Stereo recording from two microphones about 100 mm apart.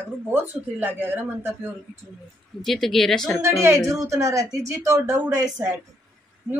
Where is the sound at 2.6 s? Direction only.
Centre (ahead or behind).